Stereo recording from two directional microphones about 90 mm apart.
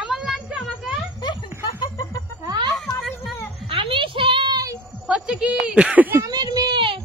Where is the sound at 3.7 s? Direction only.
75° right (ahead or behind); by 4.6 s 60° right (ahead or behind).